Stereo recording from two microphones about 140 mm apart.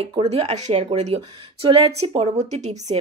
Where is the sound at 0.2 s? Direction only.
50° right (ahead or behind).